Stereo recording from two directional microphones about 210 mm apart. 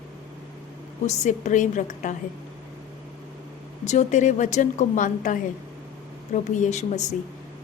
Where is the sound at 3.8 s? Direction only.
35° left (ahead or behind).